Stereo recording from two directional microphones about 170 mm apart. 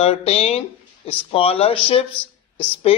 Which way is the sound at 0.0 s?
40° left (ahead or behind).